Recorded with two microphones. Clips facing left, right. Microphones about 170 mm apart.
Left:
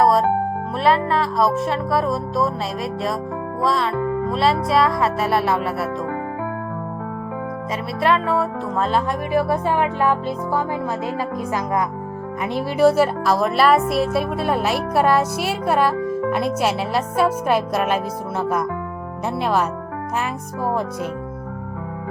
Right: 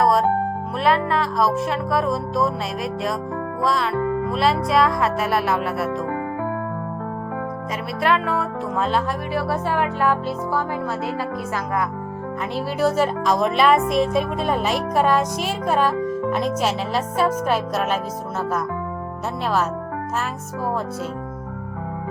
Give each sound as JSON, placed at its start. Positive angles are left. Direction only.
{"t": 0.0, "sound": "music", "side_deg": 0}
{"t": 0.8, "sound": "speech", "side_deg": 0}
{"t": 3.6, "sound": "speech", "side_deg": 0}
{"t": 8.0, "sound": "speech", "side_deg": 0}
{"t": 8.9, "sound": "speech", "side_deg": 15}